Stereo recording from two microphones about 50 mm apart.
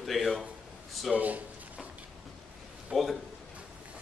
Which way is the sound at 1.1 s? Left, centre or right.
Right.